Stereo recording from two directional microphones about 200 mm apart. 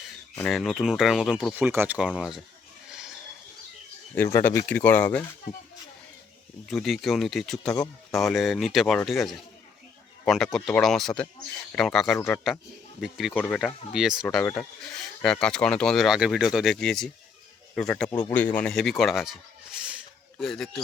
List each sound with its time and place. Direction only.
0.0 s speech: centre (ahead or behind)
2.9 s pig: 5° right (ahead or behind)
4.1 s speech: 10° left (ahead or behind)
6.7 s speech: centre (ahead or behind)
14.3 s speech: 10° left (ahead or behind)
18.1 s speech: 20° left (ahead or behind)
18.5 s speech: 5° left (ahead or behind)